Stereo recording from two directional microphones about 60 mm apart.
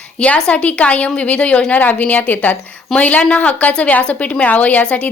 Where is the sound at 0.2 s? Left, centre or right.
Centre.